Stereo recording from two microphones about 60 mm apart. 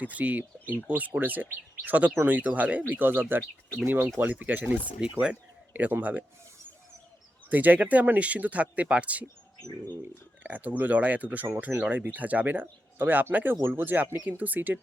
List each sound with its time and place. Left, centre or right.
0.0 s speech: right
7.5 s speech: right
10.4 s speech: right